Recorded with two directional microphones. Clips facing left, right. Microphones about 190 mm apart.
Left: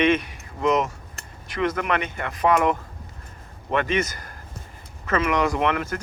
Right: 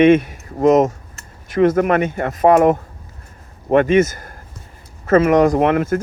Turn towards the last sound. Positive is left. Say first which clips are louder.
# right 8 dB
turn(degrees=-50)  # may be behind; listen again after turning